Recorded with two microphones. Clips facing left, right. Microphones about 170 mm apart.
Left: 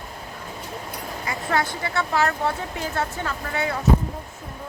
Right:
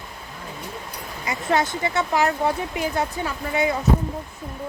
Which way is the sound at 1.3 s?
20° right (ahead or behind).